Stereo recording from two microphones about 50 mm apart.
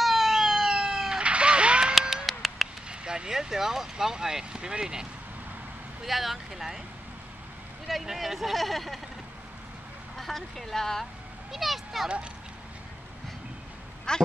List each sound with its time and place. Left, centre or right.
0.0 s emergency vehicle: centre
1.2 s a sound: right
2.0 s a sound: centre
2.9 s speech: centre
6.0 s speech: centre
7.9 s speech: centre
10.1 s speech: centre
11.5 s speech: centre
14.1 s speech: centre